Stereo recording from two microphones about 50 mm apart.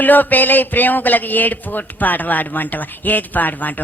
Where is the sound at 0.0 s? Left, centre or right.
Left.